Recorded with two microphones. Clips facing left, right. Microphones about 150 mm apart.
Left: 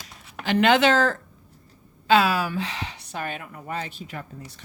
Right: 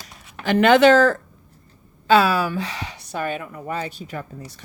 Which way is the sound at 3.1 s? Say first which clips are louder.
Right 7 dB; 40° right (ahead or behind).